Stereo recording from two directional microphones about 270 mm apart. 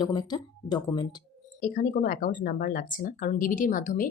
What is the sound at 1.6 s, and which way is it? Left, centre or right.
Speech, left.